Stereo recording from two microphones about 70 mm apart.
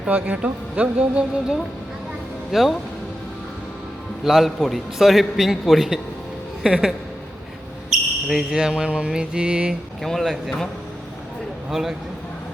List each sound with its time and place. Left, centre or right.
0.1 s speech: right
2.5 s a man's voice: centre
4.2 s a man's voice: centre
6.6 s a woman's voice: centre
7.9 s basketball bounce: centre
10.0 s a man's voice: centre
11.7 s a man's voice: centre